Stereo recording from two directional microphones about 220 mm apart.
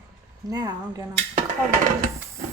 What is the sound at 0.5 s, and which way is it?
Speech, 15° right (ahead or behind).